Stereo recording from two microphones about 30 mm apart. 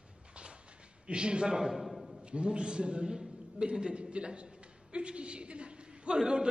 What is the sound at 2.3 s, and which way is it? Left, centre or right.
A man's voice, right.